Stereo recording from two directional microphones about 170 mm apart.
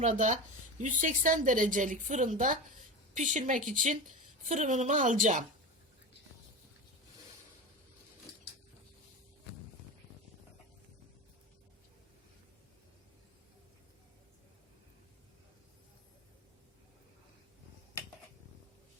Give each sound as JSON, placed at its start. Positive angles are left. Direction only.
{"t": 0.0, "sound": "a woman's voice", "side_deg": -45}